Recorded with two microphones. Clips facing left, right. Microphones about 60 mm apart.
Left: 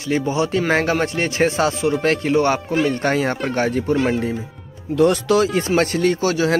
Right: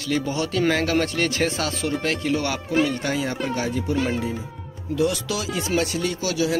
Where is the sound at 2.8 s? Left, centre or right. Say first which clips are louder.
Left 5 dB; left.